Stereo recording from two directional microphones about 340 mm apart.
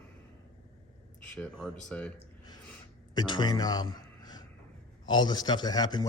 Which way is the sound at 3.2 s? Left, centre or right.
Centre.